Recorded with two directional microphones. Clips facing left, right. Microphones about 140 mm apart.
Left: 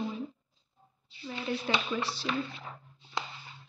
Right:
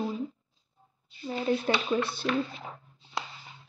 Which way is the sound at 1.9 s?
35° right (ahead or behind).